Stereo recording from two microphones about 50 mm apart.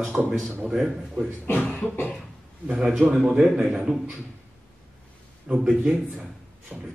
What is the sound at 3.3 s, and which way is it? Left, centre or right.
Speech, right.